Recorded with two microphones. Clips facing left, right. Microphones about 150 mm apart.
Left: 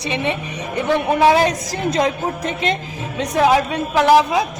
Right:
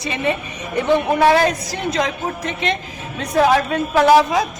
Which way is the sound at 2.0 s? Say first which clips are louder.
Left 3 dB; 30° left (ahead or behind).